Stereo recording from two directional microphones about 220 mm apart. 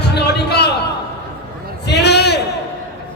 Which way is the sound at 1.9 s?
50° left (ahead or behind).